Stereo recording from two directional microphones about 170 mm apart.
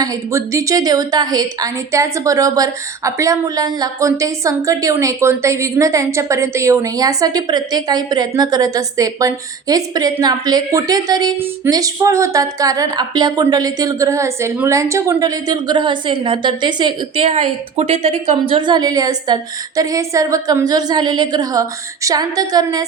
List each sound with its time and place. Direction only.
0.0 s a woman's voice: 20° right (ahead or behind); by 18.3 s 40° right (ahead or behind)
18.5 s a woman's voice: 25° right (ahead or behind)